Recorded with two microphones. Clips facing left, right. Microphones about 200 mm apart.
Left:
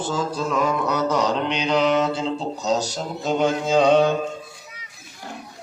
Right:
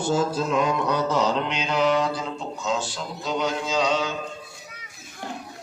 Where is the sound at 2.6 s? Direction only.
40° left (ahead or behind); by 4.1 s 55° left (ahead or behind).